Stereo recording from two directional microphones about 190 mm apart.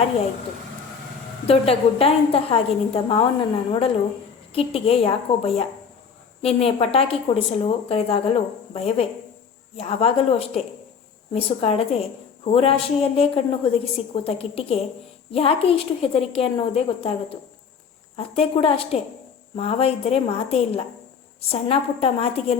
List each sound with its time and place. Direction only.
1.5 s a woman's voice: 30° left (ahead or behind)